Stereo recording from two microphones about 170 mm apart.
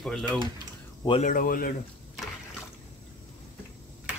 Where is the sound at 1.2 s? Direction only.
55° left (ahead or behind).